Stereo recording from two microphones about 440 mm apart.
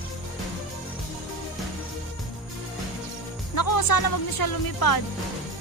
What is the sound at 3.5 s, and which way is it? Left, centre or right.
Speech, left.